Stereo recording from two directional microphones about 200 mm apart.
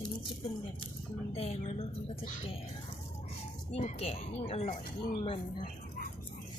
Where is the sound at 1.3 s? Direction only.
30° left (ahead or behind).